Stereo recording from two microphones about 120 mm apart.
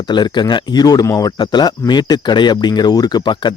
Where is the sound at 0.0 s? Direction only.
40° left (ahead or behind).